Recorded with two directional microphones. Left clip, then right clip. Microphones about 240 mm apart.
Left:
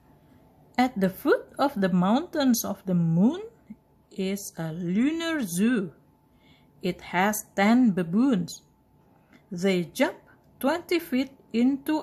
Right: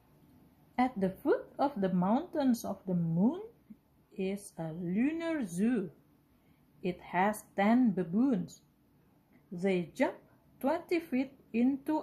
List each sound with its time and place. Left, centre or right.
0.7 s speech: centre